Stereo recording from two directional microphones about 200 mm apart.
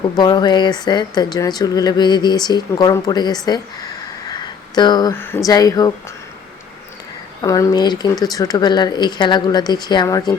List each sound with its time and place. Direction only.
0.2 s speech: 20° left (ahead or behind)
4.3 s a sound: 20° left (ahead or behind)
5.5 s speech: 20° left (ahead or behind)
7.4 s speech: 15° left (ahead or behind)